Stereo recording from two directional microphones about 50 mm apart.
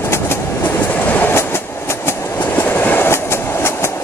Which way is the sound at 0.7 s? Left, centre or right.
Left.